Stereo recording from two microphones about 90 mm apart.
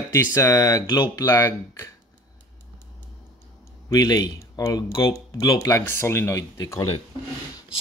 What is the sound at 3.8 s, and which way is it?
Speech, 45° left (ahead or behind).